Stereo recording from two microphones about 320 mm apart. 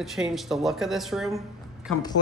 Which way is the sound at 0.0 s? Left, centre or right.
Centre.